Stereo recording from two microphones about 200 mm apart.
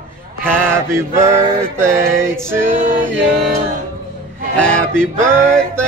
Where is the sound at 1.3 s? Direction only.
15° right (ahead or behind).